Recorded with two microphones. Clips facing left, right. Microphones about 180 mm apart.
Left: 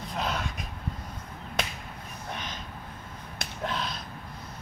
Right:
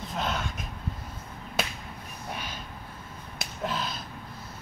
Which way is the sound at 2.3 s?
10° right (ahead or behind).